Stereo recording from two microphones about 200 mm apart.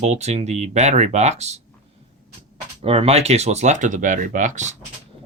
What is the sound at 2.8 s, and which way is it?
Speech, 30° right (ahead or behind).